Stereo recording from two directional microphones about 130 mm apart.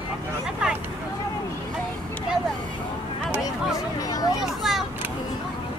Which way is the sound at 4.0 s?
30° left (ahead or behind).